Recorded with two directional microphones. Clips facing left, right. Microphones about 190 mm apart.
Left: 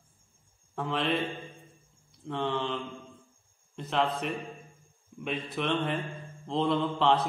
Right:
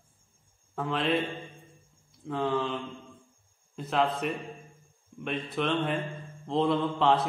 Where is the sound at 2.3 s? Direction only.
Centre (ahead or behind).